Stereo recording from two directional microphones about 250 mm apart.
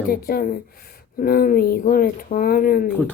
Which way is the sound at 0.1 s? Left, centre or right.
Left.